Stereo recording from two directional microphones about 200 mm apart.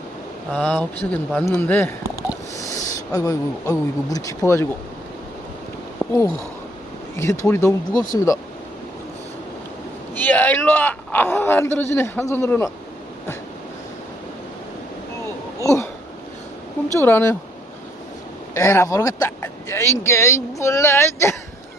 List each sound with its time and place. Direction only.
0.6 s a man's voice: 10° left (ahead or behind)
6.0 s a man's voice: 15° left (ahead or behind)
10.2 s a man's voice: 10° left (ahead or behind)
15.6 s a sound: 15° left (ahead or behind)
17.0 s a man's voice: 10° left (ahead or behind)
18.5 s a man's voice: 15° left (ahead or behind)